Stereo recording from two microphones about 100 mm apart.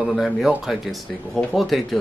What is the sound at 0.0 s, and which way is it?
Speech, centre (ahead or behind).